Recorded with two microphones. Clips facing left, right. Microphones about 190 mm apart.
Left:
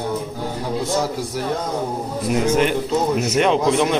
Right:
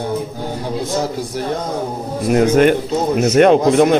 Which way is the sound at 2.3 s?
55° right (ahead or behind).